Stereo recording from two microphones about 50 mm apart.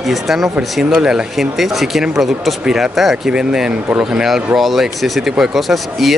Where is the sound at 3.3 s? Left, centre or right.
Centre.